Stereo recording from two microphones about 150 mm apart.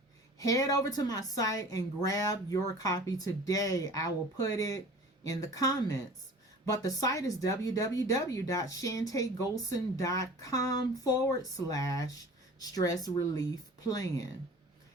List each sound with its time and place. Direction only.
0.3 s speech: 25° left (ahead or behind)